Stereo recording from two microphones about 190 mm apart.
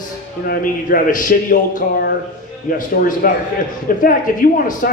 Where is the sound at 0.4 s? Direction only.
50° left (ahead or behind).